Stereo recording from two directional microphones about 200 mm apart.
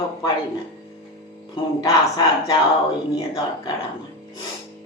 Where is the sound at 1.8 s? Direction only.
20° left (ahead or behind).